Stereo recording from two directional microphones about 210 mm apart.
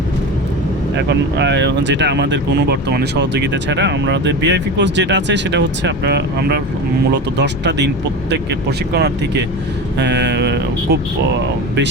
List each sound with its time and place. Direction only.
0.9 s speech: 55° right (ahead or behind)
8.9 s speech: 55° right (ahead or behind)